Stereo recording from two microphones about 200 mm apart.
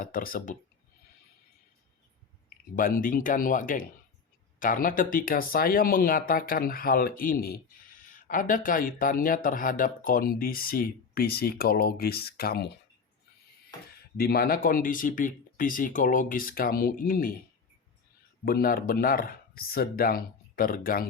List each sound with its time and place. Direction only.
0.0 s speech: 45° left (ahead or behind)
2.7 s speech: 45° left (ahead or behind)
14.2 s speech: 50° left (ahead or behind)
18.4 s speech: 45° left (ahead or behind)